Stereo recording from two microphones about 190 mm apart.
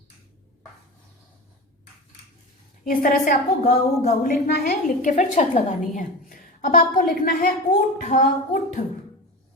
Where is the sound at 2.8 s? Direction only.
45° left (ahead or behind).